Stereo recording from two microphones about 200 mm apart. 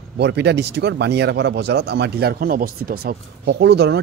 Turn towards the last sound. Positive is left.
turn(degrees=-60)  # may be behind; listen again after turning